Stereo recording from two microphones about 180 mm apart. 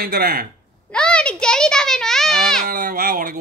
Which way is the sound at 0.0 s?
55° right (ahead or behind).